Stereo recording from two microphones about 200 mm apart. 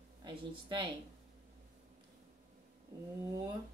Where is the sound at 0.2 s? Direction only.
25° right (ahead or behind).